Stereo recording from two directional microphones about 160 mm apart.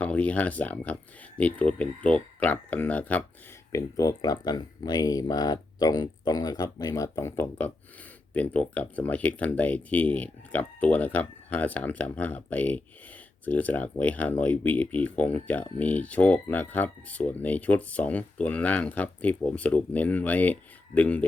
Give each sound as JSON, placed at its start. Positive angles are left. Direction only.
{"t": 0.0, "sound": "speech", "side_deg": 10}
{"t": 3.7, "sound": "speech", "side_deg": 20}